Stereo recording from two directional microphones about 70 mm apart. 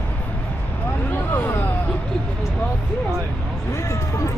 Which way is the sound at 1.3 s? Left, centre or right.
Left.